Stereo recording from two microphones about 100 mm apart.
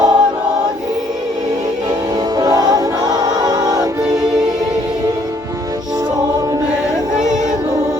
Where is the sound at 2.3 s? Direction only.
40° right (ahead or behind).